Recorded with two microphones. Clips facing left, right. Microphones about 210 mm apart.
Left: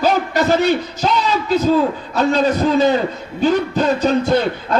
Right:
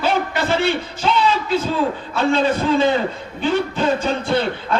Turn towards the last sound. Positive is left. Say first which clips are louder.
# left 3 dB
turn(degrees=40)  # may be behind; listen again after turning